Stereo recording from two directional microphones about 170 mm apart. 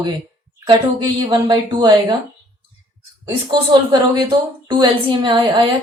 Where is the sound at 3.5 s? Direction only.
25° right (ahead or behind).